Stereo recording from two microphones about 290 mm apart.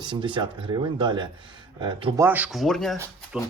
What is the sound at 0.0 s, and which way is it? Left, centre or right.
A man's voice, centre.